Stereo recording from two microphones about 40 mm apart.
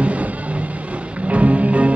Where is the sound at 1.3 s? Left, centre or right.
Right.